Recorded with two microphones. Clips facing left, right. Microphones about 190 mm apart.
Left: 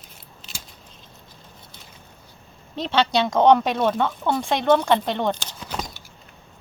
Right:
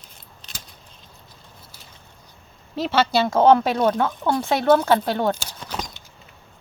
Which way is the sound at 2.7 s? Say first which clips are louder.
Right 1 dB; 5° right (ahead or behind).